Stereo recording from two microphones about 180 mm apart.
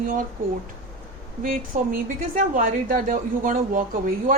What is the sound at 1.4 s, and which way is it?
A woman's voice, 50° right (ahead or behind).